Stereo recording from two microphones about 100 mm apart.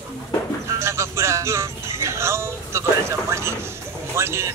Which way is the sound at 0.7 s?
25° right (ahead or behind).